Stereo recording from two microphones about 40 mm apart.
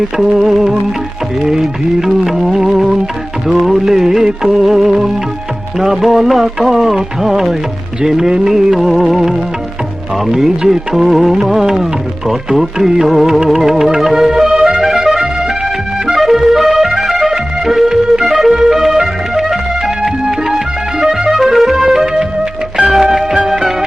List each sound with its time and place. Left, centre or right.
0.3 s music: centre